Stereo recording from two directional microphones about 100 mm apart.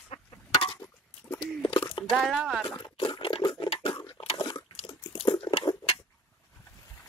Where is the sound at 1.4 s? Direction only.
55° left (ahead or behind).